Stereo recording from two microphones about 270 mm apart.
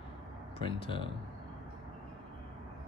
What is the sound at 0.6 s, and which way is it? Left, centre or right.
Speech, centre.